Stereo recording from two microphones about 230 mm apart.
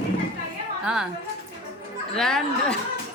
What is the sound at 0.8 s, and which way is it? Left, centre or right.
Speech, centre.